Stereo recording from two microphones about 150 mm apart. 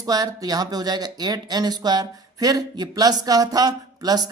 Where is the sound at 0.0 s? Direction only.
25° right (ahead or behind).